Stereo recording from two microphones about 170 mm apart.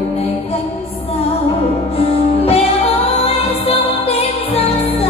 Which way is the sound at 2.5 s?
35° left (ahead or behind).